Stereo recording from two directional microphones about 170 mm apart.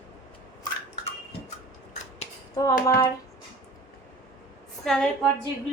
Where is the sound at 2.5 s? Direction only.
20° left (ahead or behind).